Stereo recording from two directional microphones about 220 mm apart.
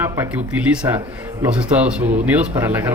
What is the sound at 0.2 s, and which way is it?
Speech, 10° right (ahead or behind).